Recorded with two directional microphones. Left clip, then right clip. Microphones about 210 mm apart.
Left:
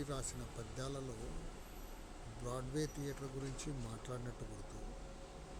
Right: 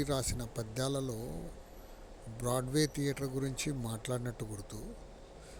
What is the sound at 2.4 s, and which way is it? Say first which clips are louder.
Speech: right 10 dB; 35° right (ahead or behind).